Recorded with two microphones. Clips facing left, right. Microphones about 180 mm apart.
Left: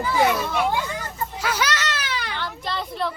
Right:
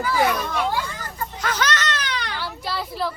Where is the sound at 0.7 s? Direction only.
20° left (ahead or behind).